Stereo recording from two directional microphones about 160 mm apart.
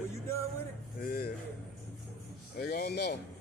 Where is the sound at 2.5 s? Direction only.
85° left.